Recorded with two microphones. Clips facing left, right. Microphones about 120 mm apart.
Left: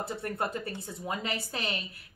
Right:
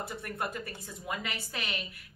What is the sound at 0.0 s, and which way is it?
A woman's voice, 30° left (ahead or behind).